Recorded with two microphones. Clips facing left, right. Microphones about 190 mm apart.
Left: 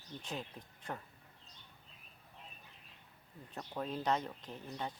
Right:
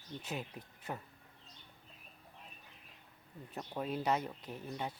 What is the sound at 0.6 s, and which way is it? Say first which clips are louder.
Speech: right 2 dB; centre (ahead or behind).